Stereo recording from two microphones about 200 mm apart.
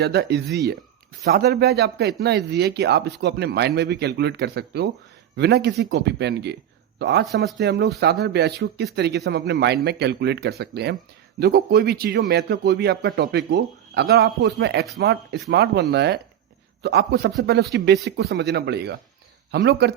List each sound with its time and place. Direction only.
0.0 s speech: 55° right (ahead or behind)